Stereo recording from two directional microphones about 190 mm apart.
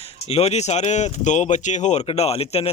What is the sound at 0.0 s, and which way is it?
Speech, 35° left (ahead or behind).